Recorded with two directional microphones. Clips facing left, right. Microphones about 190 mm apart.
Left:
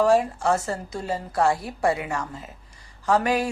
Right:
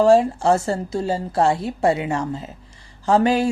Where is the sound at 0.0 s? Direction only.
30° right (ahead or behind).